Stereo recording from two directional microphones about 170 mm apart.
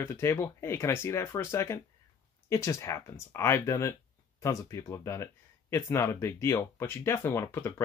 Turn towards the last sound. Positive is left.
turn(degrees=15)  # may be behind; listen again after turning